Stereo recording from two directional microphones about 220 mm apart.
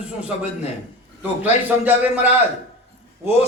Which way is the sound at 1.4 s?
10° right (ahead or behind).